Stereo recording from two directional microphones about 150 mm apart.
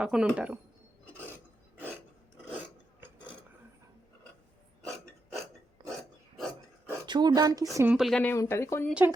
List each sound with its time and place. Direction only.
0.0 s speech: 5° right (ahead or behind)
7.0 s speech: 30° right (ahead or behind)
7.9 s speech: centre (ahead or behind)
8.2 s speech: 15° left (ahead or behind)
8.9 s speech: 10° right (ahead or behind)